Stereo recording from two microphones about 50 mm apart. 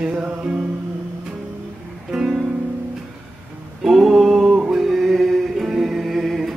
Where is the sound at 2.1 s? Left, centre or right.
Centre.